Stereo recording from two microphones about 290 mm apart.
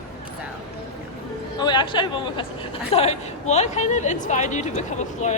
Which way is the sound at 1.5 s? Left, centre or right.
Centre.